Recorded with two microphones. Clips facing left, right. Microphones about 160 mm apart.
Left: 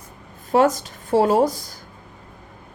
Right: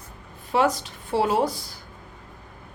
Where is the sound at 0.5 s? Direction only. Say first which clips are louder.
Left 5 dB; 45° left (ahead or behind).